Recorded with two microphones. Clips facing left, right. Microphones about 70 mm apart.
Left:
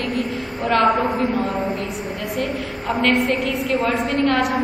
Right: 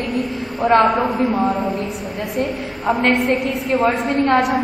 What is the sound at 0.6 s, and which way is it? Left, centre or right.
A woman's voice, right.